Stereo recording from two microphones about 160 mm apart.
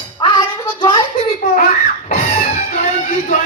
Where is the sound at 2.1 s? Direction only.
50° left (ahead or behind).